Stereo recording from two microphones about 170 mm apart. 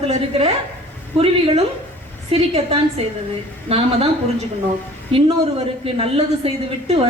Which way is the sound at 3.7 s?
35° right (ahead or behind).